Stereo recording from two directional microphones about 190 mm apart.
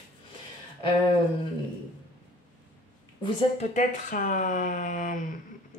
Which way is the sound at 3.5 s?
40° left (ahead or behind).